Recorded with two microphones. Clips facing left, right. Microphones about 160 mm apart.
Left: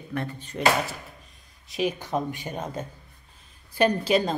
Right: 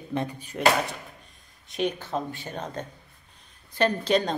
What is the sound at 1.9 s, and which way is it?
Speech, 15° left (ahead or behind).